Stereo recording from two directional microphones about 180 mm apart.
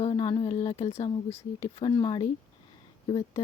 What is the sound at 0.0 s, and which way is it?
Speech, 30° left (ahead or behind).